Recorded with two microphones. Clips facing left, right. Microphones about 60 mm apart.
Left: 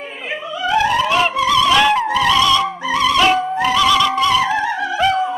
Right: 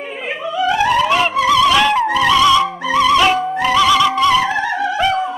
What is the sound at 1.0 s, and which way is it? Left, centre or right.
Music, centre.